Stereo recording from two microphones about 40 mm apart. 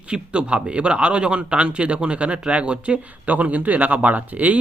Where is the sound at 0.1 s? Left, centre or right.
Right.